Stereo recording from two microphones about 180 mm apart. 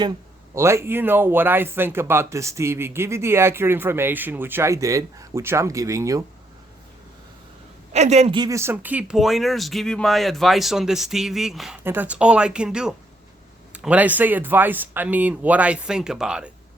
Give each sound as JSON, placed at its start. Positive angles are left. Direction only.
{"t": 0.5, "sound": "speech", "side_deg": -15}
{"t": 7.9, "sound": "a woman's voice", "side_deg": -40}
{"t": 8.4, "sound": "speech", "side_deg": -15}